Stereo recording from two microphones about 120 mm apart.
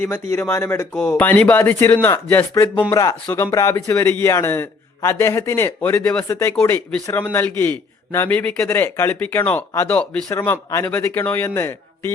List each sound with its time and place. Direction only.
0.0 s speech: 20° left (ahead or behind)
2.9 s speech: 25° left (ahead or behind); by 10.2 s 5° left (ahead or behind)
10.2 s speech: 20° left (ahead or behind)